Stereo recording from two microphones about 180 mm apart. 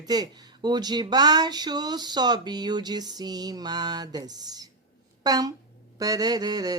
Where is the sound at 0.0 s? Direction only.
20° right (ahead or behind).